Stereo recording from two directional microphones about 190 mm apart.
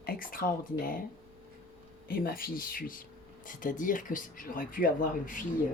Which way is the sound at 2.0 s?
50° left (ahead or behind).